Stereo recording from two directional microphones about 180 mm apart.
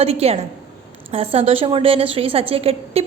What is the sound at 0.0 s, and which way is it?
A woman's voice, 35° right (ahead or behind).